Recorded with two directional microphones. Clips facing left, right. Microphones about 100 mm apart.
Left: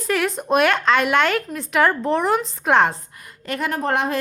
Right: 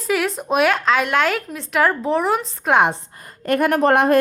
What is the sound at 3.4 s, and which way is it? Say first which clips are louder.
Speech: right 7 dB; 50° right (ahead or behind).